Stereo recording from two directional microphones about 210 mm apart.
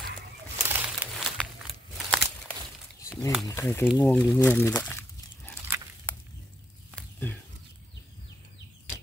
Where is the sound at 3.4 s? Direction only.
15° left (ahead or behind).